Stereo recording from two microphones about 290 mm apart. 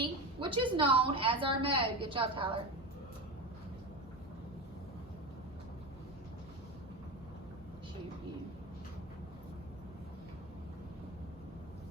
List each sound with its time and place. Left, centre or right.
0.0 s a woman's voice: centre